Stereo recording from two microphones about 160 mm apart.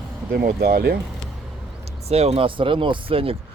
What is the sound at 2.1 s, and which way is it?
Speech, 40° right (ahead or behind).